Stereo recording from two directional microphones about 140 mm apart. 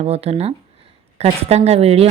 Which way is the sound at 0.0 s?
45° right (ahead or behind).